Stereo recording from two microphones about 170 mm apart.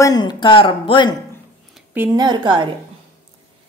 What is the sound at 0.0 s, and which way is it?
Speech, 25° left (ahead or behind).